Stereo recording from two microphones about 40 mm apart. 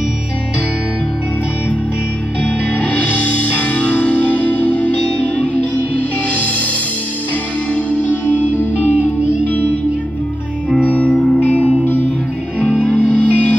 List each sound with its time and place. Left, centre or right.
2.4 s music: left
7.7 s music: left
10.8 s music: left